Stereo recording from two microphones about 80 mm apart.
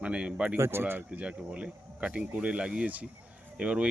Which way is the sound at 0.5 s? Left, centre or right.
Right.